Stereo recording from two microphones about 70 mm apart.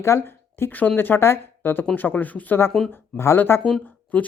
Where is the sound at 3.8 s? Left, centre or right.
Left.